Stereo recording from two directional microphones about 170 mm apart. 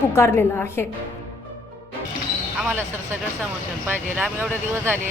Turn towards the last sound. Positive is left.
turn(degrees=-10)  # may be behind; listen again after turning